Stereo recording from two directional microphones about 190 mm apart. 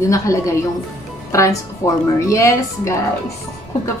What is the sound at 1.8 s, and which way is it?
Speech, 15° left (ahead or behind).